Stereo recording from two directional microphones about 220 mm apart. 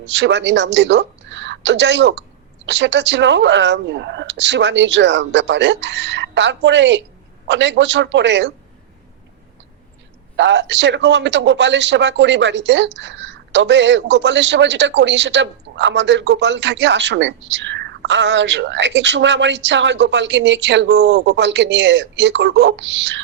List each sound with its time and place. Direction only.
0.0 s a man's voice: 55° right (ahead or behind)
10.3 s a man's voice: 55° right (ahead or behind)